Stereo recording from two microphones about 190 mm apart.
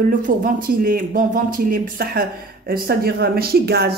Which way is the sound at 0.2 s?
45° right (ahead or behind).